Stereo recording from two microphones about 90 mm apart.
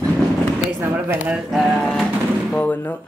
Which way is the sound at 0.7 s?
20° right (ahead or behind).